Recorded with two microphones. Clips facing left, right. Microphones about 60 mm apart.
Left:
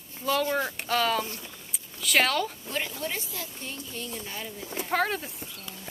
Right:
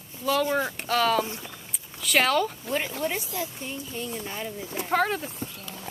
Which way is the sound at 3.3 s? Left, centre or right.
Centre.